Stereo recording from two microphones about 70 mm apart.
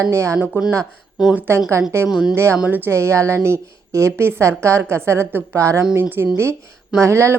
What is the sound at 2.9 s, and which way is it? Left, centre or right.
A woman's voice, right.